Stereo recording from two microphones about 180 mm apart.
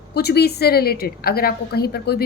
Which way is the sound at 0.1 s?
65° left (ahead or behind).